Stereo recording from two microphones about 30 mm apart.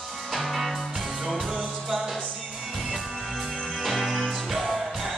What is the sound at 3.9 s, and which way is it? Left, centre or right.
Music, centre.